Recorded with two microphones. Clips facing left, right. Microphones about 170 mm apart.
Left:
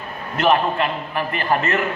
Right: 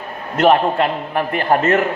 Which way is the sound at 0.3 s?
55° right (ahead or behind).